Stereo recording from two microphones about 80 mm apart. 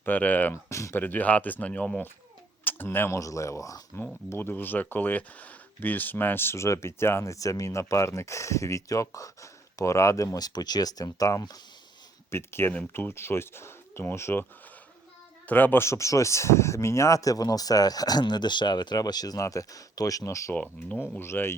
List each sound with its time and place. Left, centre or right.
0.0 s speech: left
0.5 s speech: left
0.9 s speech: left
3.2 s speech: left
4.3 s speech: left
7.3 s speech: left
10.2 s speech: left
12.3 s speech: left
15.4 s speech: left
15.8 s speech: left
20.5 s speech: left
21.2 s speech: left